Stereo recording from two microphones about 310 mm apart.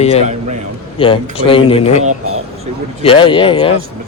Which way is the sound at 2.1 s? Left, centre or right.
Right.